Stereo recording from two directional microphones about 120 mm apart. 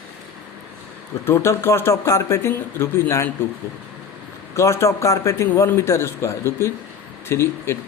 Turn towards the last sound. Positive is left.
turn(degrees=20)  # may be behind; listen again after turning